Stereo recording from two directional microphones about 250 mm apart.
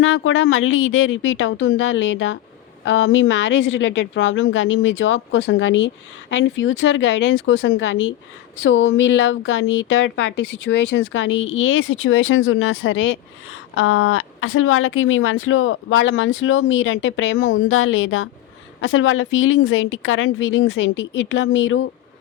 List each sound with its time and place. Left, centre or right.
0.0 s speech: left